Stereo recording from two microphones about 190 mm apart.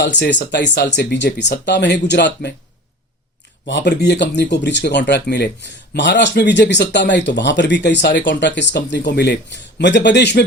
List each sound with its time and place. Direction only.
0.0 s speech: 65° left (ahead or behind)
3.7 s speech: 65° left (ahead or behind)